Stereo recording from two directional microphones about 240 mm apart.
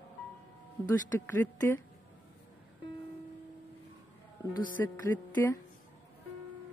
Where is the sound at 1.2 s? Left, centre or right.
Centre.